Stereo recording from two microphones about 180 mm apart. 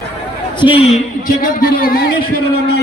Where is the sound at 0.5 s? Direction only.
30° left (ahead or behind).